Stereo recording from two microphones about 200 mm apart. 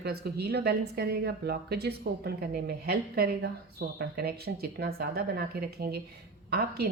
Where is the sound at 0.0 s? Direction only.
55° right (ahead or behind).